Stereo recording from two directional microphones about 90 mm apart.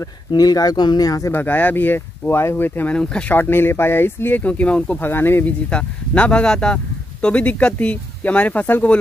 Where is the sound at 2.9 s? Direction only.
10° left (ahead or behind).